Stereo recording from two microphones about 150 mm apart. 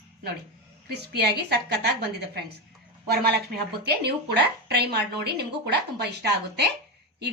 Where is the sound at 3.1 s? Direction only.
90° right.